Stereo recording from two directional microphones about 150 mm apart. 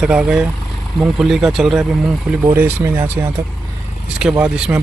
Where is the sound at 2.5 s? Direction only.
15° right (ahead or behind).